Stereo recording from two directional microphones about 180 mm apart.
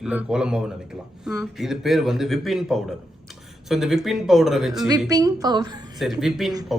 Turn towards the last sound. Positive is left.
turn(degrees=0)  # may be behind; listen again after turning